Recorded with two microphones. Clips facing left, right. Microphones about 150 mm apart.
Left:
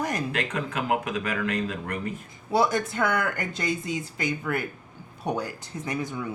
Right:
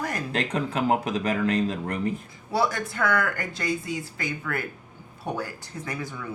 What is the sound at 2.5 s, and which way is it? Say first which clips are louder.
Speech: left 2 dB; 20° left (ahead or behind).